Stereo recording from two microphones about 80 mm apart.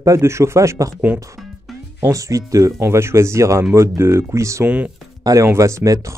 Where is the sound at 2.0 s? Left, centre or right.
Right.